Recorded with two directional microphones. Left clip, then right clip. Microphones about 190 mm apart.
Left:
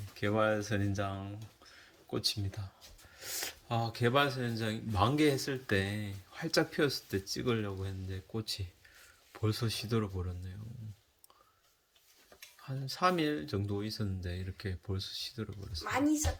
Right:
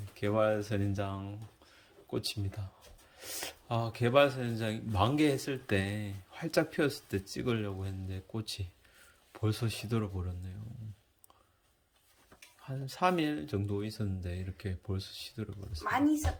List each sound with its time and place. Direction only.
0.2 s speech: 5° right (ahead or behind)
12.6 s speech: 5° right (ahead or behind)
15.8 s speech: 25° right (ahead or behind)